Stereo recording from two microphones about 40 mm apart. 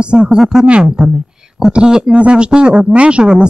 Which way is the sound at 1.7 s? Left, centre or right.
Centre.